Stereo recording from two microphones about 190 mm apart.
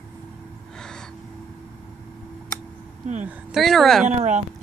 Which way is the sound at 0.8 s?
5° left (ahead or behind).